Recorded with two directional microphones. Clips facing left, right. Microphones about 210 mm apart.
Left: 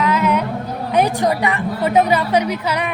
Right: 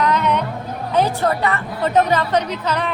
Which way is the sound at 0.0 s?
5° left (ahead or behind).